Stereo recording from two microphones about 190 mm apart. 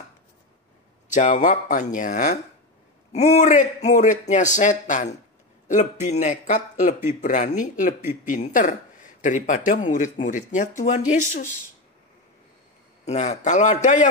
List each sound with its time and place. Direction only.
1.1 s speech: 40° left (ahead or behind)
13.0 s speech: 35° left (ahead or behind)